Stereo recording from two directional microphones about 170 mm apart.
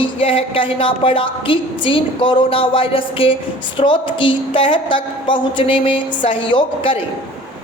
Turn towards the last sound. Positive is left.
turn(degrees=30)  # may be behind; listen again after turning